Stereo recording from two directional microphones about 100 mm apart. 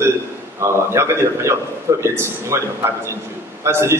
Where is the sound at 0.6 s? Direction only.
25° right (ahead or behind).